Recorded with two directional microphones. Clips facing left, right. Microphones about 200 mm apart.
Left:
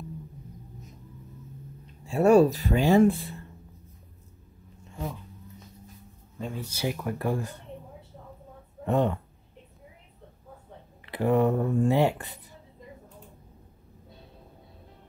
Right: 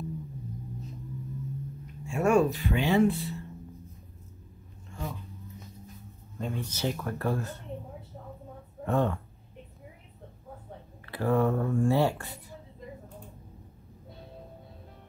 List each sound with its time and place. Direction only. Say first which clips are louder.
2.0 s speech: left 5 dB; 35° left (ahead or behind); by 3.3 s 50° left (ahead or behind)
6.3 s speech: right 1 dB; 5° left (ahead or behind)
8.8 s speech: left 2 dB; 20° left (ahead or behind)
11.1 s speech: left 3 dB; 20° left (ahead or behind)